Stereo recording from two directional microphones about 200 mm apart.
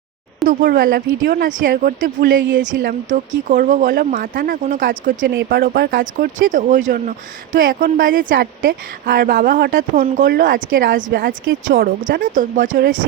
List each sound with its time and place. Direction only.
0.4 s a woman's voice: 45° right (ahead or behind)